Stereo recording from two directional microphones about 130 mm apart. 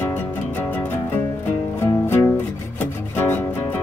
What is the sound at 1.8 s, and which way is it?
Music, 15° left (ahead or behind).